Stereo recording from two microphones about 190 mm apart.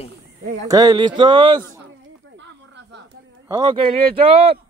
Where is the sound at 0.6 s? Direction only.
20° right (ahead or behind).